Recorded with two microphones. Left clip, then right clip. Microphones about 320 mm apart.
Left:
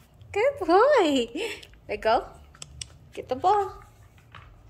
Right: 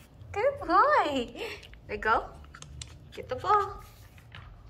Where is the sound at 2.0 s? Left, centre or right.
Centre.